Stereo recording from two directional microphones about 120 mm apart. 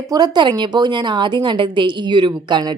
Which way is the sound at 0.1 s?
35° right (ahead or behind).